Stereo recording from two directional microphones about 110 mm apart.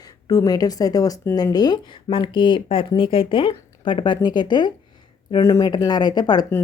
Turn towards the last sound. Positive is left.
turn(degrees=40)  # may be behind; listen again after turning